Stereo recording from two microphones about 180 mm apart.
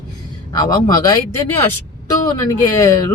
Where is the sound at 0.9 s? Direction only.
20° left (ahead or behind).